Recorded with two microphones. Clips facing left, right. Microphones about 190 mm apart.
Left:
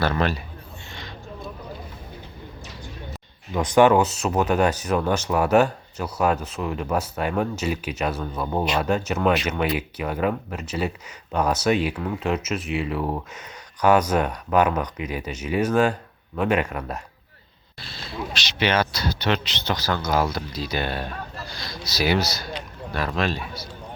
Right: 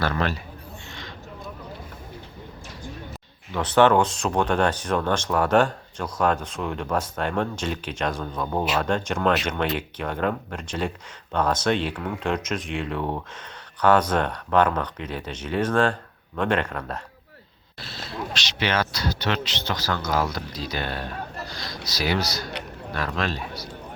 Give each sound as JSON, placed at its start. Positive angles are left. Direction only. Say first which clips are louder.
{"t": 0.0, "sound": "a man's voice", "louder": "left 2 dB", "side_deg": 20}
{"t": 3.5, "sound": "speech", "louder": "left 2 dB", "side_deg": 10}
{"t": 17.7, "sound": "a sound", "louder": "right 1 dB", "side_deg": 0}
{"t": 18.3, "sound": "speech", "louder": "left 3 dB", "side_deg": 15}